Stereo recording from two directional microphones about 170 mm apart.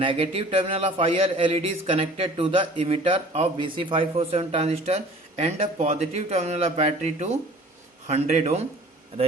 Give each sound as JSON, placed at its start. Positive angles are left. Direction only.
{"t": 0.0, "sound": "speech", "side_deg": -30}